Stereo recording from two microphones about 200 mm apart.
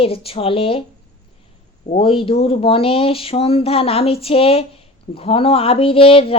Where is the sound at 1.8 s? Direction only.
30° left (ahead or behind).